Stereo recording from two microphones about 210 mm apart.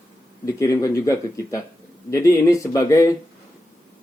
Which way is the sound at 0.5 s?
15° left (ahead or behind).